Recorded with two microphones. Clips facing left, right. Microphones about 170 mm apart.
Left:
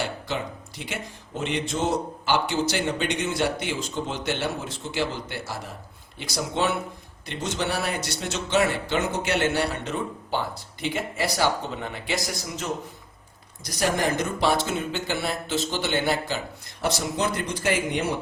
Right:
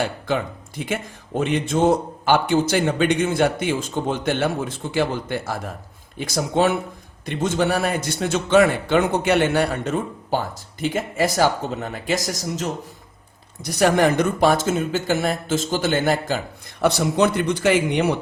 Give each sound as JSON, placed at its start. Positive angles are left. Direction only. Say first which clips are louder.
{"t": 0.8, "sound": "a man's voice", "louder": "right 8 dB", "side_deg": -50}
{"t": 13.7, "sound": "a man's voice", "louder": "right 7 dB", "side_deg": -65}
{"t": 16.8, "sound": "speech", "louder": "right 8 dB", "side_deg": -60}